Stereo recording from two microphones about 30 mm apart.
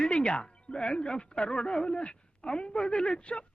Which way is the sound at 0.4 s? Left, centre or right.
Left.